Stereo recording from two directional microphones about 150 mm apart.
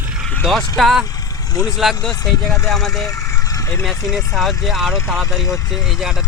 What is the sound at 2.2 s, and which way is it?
Speech, 25° left (ahead or behind).